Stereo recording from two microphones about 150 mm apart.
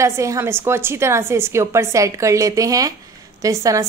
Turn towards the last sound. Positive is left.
turn(degrees=-20)  # may be behind; listen again after turning